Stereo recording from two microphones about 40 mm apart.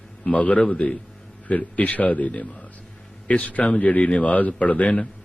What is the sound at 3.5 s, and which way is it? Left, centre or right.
Speech, left.